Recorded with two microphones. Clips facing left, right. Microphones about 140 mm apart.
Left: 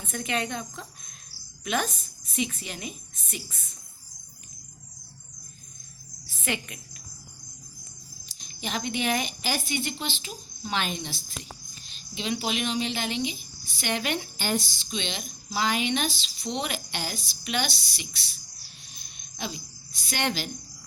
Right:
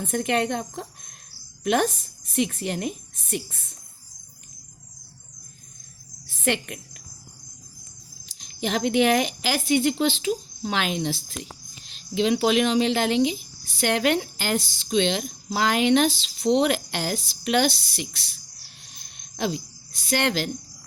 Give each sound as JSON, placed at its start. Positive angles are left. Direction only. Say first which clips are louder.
{"t": 0.0, "sound": "a woman's voice", "louder": "right 7 dB", "side_deg": -60}
{"t": 6.2, "sound": "cricket", "louder": "right 7 dB", "side_deg": -65}
{"t": 8.4, "sound": "speech", "louder": "right 7 dB", "side_deg": -80}
{"t": 19.4, "sound": "speech", "louder": "right 9 dB", "side_deg": -85}